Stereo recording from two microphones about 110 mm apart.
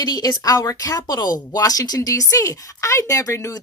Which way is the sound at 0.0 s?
35° left (ahead or behind).